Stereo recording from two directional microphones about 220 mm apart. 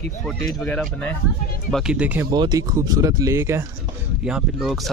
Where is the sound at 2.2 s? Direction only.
20° right (ahead or behind).